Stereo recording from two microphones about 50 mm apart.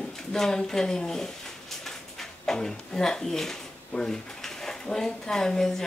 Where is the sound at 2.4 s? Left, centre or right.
Centre.